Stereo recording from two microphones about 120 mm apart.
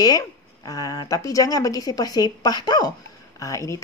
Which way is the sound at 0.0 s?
30° left (ahead or behind).